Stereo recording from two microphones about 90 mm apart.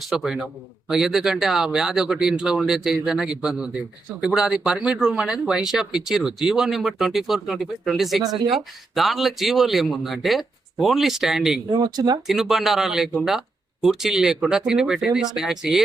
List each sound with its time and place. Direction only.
0.0 s speech: centre (ahead or behind)
11.7 s speech: 55° right (ahead or behind)
12.3 s speech: 5° right (ahead or behind)